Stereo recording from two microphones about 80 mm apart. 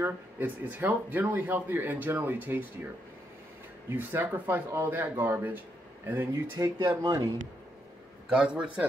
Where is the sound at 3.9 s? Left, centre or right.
Right.